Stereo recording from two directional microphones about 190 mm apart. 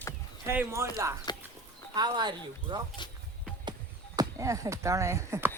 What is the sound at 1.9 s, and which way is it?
Speech, 20° right (ahead or behind).